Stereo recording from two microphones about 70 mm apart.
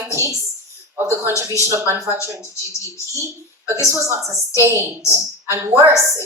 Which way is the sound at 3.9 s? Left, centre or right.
Right.